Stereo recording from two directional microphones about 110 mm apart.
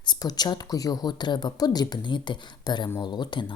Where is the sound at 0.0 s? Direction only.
40° left (ahead or behind).